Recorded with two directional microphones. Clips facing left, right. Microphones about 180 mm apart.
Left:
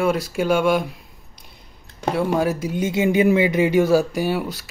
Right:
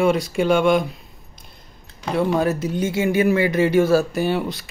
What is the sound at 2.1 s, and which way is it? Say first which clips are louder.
Speech: right 2 dB; 10° left (ahead or behind).